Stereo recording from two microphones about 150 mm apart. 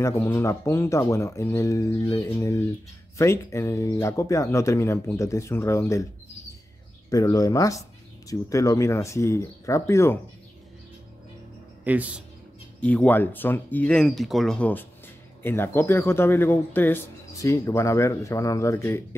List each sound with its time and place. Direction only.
0.0 s speech: 15° left (ahead or behind)
7.1 s speech: 25° left (ahead or behind)
11.8 s speech: 10° right (ahead or behind)
12.8 s speech: 10° left (ahead or behind)